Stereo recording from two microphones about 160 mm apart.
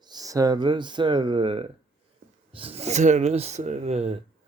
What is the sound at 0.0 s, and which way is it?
Speech, 25° right (ahead or behind).